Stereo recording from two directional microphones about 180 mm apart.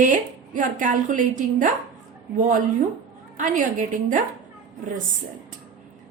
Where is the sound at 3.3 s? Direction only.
45° right (ahead or behind).